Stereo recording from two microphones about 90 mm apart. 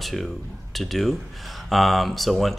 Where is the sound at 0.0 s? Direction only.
Centre (ahead or behind).